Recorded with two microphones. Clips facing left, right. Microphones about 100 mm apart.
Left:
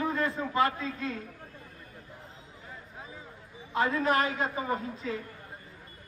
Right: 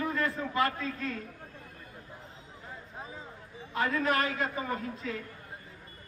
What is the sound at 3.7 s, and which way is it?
A man's voice, 35° left (ahead or behind).